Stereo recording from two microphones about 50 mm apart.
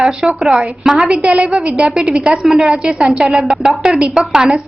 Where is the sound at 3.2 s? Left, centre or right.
Centre.